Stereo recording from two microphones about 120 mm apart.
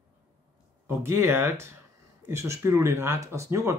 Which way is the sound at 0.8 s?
25° right (ahead or behind).